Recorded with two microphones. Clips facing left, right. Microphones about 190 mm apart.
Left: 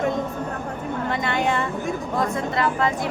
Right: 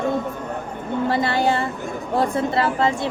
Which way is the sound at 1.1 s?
35° right (ahead or behind).